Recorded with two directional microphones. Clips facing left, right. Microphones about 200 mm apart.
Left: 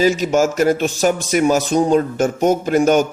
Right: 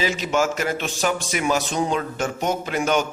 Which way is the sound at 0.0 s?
45° left (ahead or behind).